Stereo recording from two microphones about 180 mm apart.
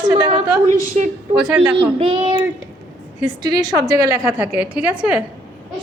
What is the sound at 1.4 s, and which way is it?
A woman's voice, 25° right (ahead or behind).